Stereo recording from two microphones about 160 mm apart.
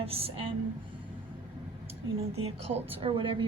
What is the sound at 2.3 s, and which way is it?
A woman's voice, 40° right (ahead or behind).